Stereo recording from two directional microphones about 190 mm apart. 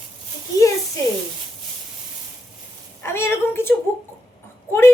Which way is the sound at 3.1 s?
15° left (ahead or behind).